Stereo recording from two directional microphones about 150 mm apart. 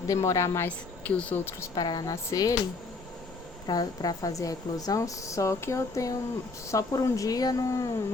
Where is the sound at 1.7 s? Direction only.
25° left (ahead or behind).